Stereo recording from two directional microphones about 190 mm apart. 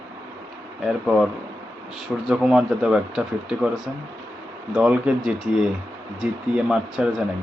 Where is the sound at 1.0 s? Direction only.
Centre (ahead or behind).